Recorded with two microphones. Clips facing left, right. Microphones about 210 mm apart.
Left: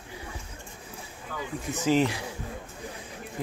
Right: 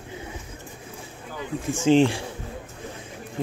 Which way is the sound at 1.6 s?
25° right (ahead or behind).